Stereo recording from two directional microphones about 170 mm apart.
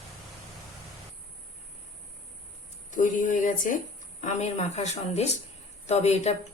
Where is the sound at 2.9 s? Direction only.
50° left (ahead or behind).